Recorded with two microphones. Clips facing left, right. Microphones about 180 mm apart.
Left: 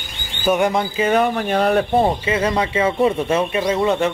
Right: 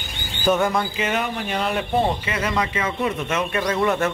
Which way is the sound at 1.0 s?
40° left (ahead or behind).